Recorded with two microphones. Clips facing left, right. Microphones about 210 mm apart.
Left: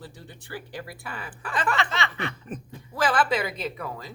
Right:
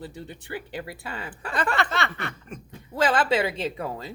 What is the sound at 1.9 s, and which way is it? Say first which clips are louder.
Speech: right 2 dB; 55° right (ahead or behind).